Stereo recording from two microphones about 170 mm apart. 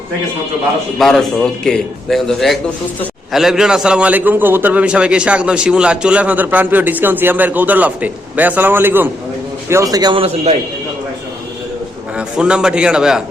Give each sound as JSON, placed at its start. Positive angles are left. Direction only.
{"t": 0.9, "sound": "a man's voice", "side_deg": 0}
{"t": 12.1, "sound": "a man's voice", "side_deg": -5}